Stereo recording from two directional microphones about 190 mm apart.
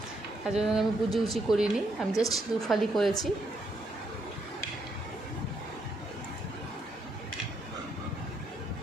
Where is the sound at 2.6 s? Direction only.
Centre (ahead or behind).